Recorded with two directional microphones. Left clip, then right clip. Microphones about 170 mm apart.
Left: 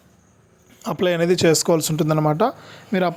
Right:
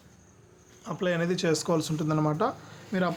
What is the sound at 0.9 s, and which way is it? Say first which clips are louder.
Speech: left 10 dB; 50° left (ahead or behind).